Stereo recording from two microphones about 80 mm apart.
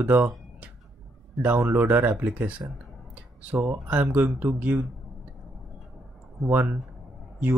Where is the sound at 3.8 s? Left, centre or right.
Right.